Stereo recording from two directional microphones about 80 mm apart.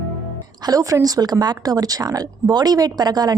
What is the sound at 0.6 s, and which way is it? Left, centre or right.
A woman's voice, right.